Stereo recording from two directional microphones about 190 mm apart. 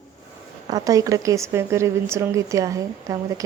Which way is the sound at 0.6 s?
20° right (ahead or behind).